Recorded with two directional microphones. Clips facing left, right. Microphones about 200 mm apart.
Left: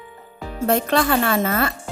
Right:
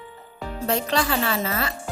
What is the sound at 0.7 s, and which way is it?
A woman's voice, 55° left (ahead or behind).